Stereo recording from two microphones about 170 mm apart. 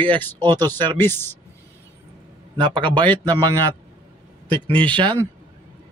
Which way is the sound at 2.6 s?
30° right (ahead or behind).